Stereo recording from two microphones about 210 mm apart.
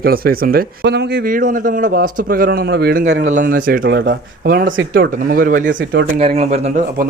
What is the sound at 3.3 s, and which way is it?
Speech, 40° right (ahead or behind).